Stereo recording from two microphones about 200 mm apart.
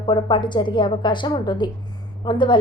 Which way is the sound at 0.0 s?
25° left (ahead or behind).